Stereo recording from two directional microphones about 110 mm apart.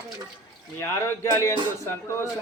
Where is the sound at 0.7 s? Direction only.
25° left (ahead or behind).